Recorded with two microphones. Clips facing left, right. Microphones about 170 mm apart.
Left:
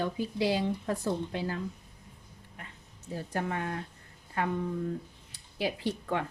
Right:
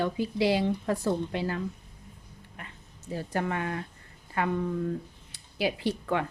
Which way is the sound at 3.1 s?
90° right.